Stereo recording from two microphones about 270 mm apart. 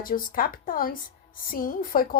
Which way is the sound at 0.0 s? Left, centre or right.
Left.